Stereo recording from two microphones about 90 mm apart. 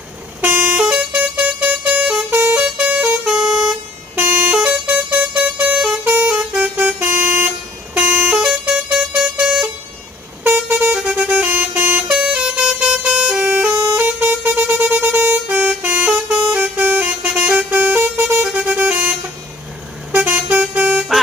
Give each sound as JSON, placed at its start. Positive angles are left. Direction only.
{"t": 0.4, "sound": "vehicle", "side_deg": -15}
{"t": 2.0, "sound": "vehicle", "side_deg": -10}
{"t": 8.3, "sound": "vehicle", "side_deg": -10}
{"t": 10.4, "sound": "vehicle", "side_deg": -15}
{"t": 16.1, "sound": "vehicle", "side_deg": -5}
{"t": 16.5, "sound": "vehicle", "side_deg": -20}
{"t": 20.1, "sound": "vehicle", "side_deg": -15}